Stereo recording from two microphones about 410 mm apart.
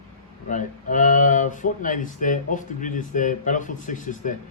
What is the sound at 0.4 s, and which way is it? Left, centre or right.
Speech, centre.